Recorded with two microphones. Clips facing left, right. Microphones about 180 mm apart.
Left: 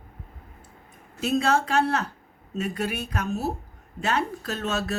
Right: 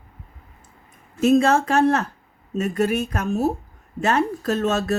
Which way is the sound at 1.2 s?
45° right (ahead or behind).